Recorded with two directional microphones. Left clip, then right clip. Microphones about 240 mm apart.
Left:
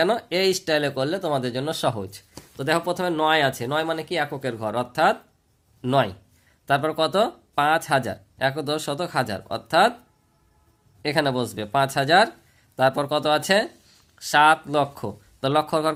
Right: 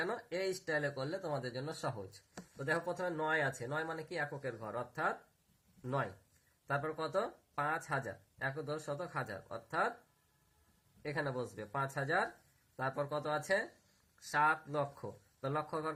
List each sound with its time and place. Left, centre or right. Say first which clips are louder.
0.0 s speech: left 17 dB; left
11.0 s speech: left 16 dB; left